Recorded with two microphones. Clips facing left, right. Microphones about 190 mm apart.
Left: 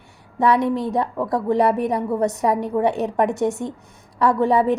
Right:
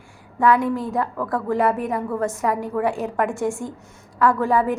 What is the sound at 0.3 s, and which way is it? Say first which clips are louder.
A woman's voice: left 1 dB; 20° left (ahead or behind).